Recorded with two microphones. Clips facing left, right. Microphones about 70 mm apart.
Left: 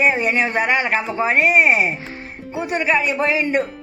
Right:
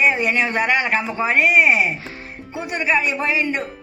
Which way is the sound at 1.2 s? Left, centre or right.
Left.